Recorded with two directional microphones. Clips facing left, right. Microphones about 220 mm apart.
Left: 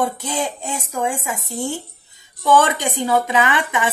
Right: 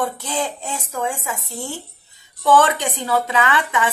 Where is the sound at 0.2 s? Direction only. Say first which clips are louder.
Left 1 dB; 15° left (ahead or behind).